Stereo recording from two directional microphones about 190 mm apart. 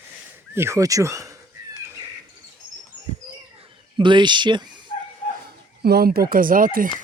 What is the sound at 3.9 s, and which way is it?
Speech, 25° right (ahead or behind).